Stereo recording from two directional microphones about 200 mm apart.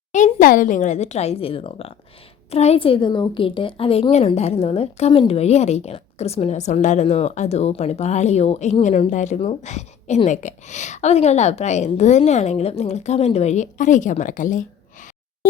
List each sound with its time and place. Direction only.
0.1 s a woman's voice: 40° left (ahead or behind)